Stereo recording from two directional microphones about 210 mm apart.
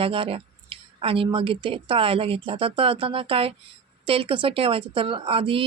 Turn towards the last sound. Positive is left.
turn(degrees=-25)  # may be behind; listen again after turning